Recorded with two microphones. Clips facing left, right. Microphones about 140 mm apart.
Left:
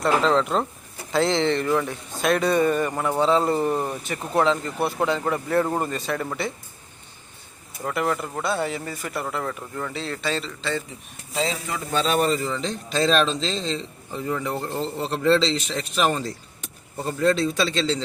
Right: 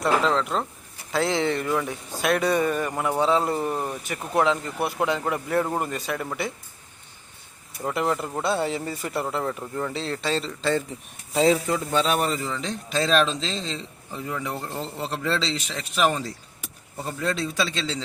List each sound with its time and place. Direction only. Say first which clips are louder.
0.0 s a man's voice: left 2 dB; 5° right (ahead or behind)
7.9 s speech: even; 20° right (ahead or behind)
10.6 s speech: right 4 dB; 45° right (ahead or behind)
11.9 s a man's voice: left 4 dB; 15° right (ahead or behind)